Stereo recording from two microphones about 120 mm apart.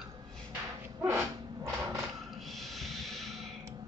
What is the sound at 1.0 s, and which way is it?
Dog, 15° right (ahead or behind).